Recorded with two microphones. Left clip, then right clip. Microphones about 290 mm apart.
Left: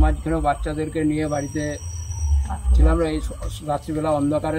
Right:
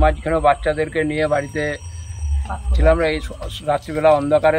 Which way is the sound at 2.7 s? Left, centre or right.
Centre.